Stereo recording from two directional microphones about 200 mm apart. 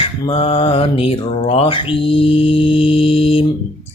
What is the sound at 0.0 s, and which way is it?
Mantra, 25° left (ahead or behind).